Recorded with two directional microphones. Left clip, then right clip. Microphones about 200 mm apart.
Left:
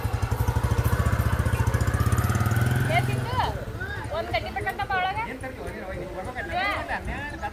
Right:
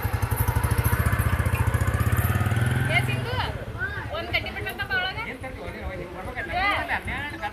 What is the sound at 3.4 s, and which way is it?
Vehicle, 50° right (ahead or behind).